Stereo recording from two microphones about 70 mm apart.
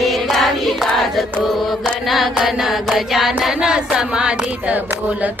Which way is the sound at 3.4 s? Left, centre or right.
Centre.